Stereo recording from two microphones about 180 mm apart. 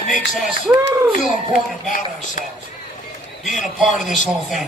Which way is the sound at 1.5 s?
45° left (ahead or behind).